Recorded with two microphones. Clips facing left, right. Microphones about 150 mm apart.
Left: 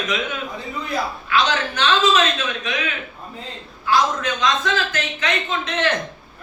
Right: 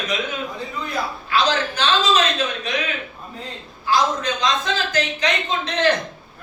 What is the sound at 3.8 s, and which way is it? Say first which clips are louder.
A man's voice: even; 35° right (ahead or behind).